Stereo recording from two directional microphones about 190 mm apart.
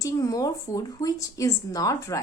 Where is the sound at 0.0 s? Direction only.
20° left (ahead or behind).